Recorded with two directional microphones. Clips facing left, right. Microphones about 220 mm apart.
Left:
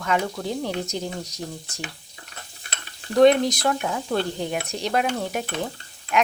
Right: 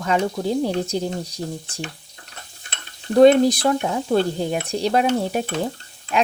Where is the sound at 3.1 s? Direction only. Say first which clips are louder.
Right 4 dB; 30° right (ahead or behind).